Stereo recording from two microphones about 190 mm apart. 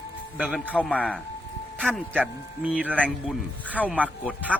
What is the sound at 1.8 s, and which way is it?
Speech, 5° right (ahead or behind).